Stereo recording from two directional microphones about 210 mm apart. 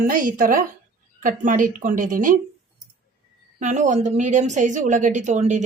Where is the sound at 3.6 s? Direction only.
35° right (ahead or behind).